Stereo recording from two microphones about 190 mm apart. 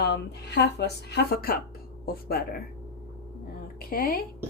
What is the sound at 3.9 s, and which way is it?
Speech, 50° left (ahead or behind).